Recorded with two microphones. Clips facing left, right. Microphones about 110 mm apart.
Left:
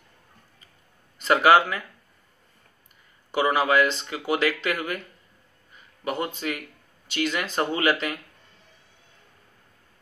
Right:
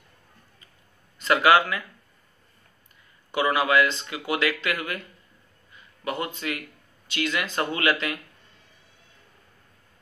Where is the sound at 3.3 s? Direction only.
30° left (ahead or behind).